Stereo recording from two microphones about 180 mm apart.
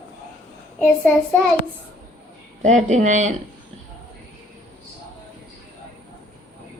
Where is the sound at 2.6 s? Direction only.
40° right (ahead or behind).